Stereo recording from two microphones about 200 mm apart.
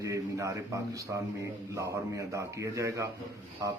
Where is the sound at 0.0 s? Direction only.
15° right (ahead or behind).